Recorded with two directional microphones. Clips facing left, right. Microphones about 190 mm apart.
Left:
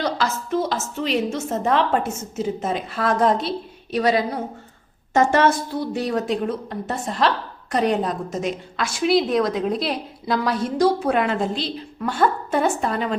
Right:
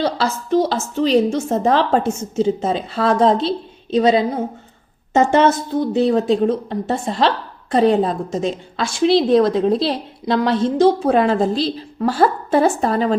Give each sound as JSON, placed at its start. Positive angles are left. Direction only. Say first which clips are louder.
{"t": 0.0, "sound": "a woman's voice", "louder": "right 4 dB", "side_deg": -30}